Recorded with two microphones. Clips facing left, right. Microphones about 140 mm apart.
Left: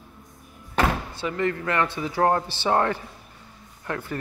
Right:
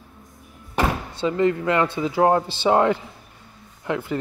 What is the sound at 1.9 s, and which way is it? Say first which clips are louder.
Speech: right 3 dB; 15° right (ahead or behind).